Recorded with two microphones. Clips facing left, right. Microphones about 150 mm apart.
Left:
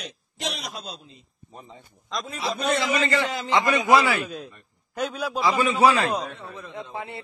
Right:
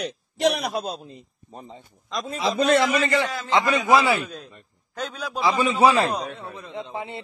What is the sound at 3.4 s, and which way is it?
Speech, 15° right (ahead or behind).